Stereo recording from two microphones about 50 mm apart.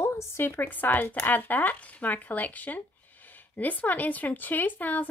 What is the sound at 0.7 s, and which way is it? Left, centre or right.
Speech, left.